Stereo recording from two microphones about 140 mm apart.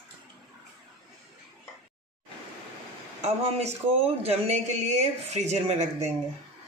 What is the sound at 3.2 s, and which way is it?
Speech, 50° right (ahead or behind).